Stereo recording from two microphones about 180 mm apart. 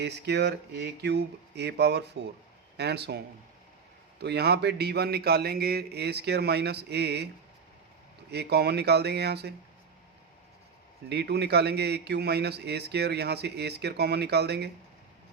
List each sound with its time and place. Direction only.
0.0 s speech: 70° right (ahead or behind)
4.2 s a man's voice: 65° right (ahead or behind)
8.3 s speech: 65° right (ahead or behind)
11.1 s speech: 70° right (ahead or behind)